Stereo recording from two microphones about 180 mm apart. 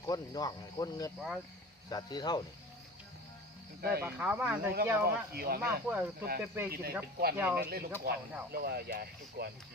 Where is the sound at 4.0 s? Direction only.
10° right (ahead or behind).